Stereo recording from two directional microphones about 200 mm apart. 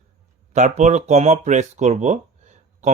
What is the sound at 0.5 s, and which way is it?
Speech, 35° right (ahead or behind).